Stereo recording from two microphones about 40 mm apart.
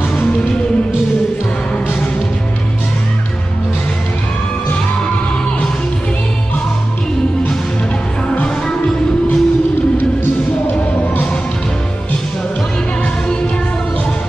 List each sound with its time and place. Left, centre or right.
8.6 s music: centre